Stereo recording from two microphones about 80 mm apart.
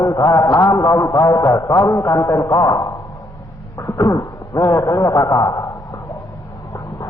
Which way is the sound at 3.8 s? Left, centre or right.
Left.